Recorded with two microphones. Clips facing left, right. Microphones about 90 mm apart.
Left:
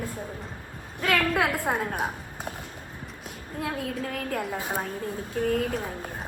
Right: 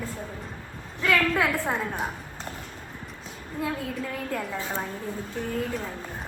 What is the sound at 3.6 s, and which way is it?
Speech, 60° left (ahead or behind).